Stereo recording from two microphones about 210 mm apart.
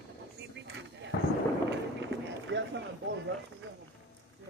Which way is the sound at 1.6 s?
60° right (ahead or behind).